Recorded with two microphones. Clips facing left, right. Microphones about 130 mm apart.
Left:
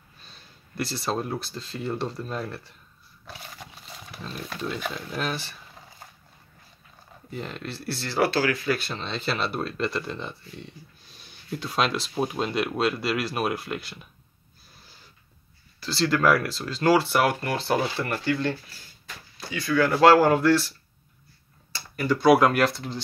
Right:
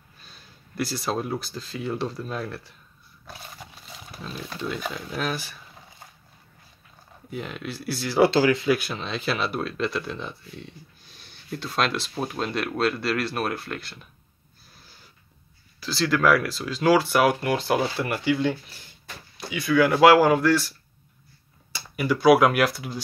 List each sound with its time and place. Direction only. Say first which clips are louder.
0.2 s speech: right 1 dB; 5° right (ahead or behind)
4.2 s speech: even; centre (ahead or behind)
7.2 s speech: right 1 dB; 5° right (ahead or behind)
8.2 s speech: right 5 dB; 20° right (ahead or behind)
8.7 s speech: right 2 dB; 5° right (ahead or behind)
15.8 s speech: even; centre (ahead or behind)
21.7 s speech: even; 5° right (ahead or behind)